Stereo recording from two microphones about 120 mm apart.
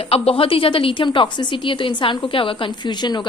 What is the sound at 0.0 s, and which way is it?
A woman's voice, 50° left (ahead or behind).